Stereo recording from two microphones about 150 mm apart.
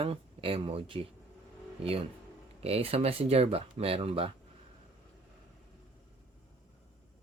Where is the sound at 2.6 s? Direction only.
40° right (ahead or behind).